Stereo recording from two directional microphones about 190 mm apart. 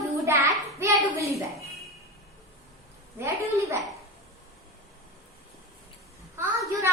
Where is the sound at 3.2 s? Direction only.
15° right (ahead or behind).